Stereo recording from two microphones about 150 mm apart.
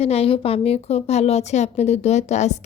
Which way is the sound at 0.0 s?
40° left (ahead or behind).